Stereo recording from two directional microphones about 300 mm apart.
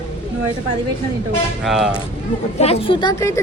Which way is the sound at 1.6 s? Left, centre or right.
Centre.